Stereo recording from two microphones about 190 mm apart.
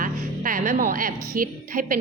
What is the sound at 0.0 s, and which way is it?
A woman's voice, 45° right (ahead or behind).